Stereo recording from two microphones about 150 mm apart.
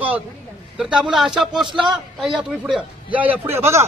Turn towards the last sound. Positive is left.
turn(degrees=-20)  # may be behind; listen again after turning